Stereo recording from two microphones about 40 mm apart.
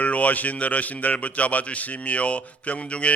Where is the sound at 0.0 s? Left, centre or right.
Left.